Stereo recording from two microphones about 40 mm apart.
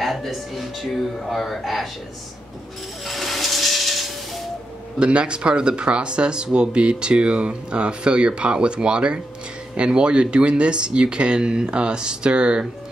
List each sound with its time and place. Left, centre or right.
0.0 s speech: centre
3.1 s rub: centre
4.9 s speech: right